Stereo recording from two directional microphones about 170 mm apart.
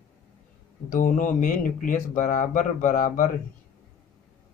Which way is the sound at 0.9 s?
50° left (ahead or behind).